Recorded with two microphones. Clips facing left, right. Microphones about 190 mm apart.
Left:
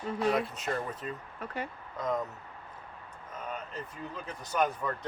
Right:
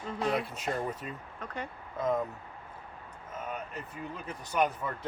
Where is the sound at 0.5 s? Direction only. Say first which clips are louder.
Right 1 dB; 10° right (ahead or behind).